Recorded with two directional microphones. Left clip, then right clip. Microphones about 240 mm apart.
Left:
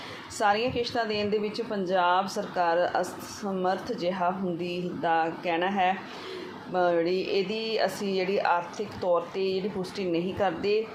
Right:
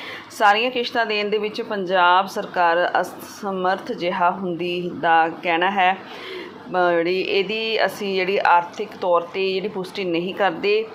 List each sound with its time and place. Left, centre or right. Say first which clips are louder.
0.3 s speech: right 8 dB; centre